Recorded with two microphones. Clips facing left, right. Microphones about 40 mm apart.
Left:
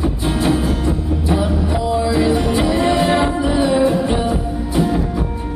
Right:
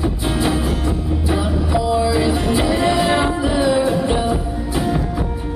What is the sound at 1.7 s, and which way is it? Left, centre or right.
Music, centre.